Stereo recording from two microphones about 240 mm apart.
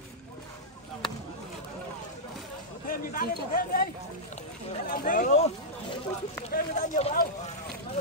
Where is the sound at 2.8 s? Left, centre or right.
Left.